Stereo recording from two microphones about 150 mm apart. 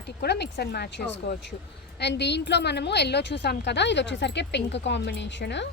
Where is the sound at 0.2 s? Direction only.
90° left.